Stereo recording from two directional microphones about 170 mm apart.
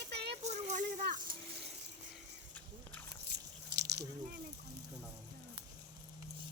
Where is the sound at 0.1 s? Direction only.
75° right (ahead or behind).